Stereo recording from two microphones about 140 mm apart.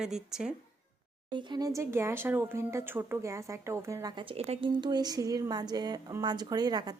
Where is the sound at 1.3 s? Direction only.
30° right (ahead or behind).